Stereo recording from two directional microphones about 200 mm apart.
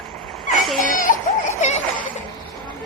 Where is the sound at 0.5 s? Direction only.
Centre (ahead or behind).